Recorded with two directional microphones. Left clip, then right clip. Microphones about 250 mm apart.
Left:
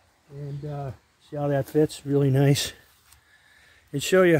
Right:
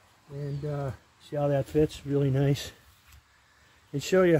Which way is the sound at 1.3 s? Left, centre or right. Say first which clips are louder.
Left 1 dB; left.